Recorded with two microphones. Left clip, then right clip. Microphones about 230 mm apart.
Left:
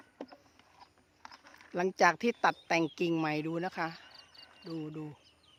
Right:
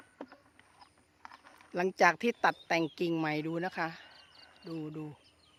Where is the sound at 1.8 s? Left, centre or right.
Centre.